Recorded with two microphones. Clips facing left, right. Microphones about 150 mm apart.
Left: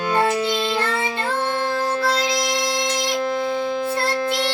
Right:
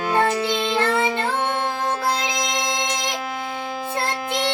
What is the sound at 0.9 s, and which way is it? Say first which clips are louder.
Child singing: right 4 dB; 55° right (ahead or behind).